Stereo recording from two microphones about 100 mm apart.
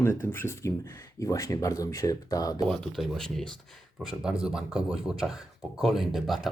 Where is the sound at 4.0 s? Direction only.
5° right (ahead or behind).